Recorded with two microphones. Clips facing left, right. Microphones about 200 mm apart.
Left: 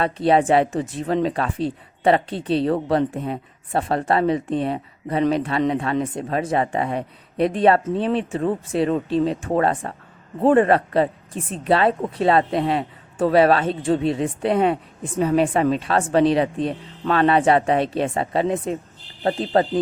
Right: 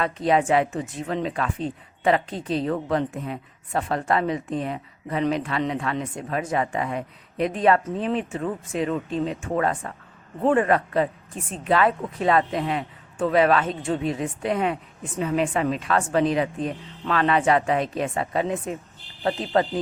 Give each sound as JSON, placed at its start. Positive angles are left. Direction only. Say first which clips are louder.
{"t": 0.0, "sound": "speech", "louder": "left 4 dB", "side_deg": 30}